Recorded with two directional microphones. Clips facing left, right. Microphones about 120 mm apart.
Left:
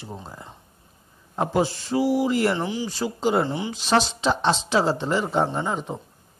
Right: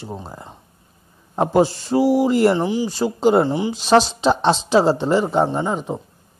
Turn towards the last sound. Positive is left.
turn(degrees=-15)  # may be behind; listen again after turning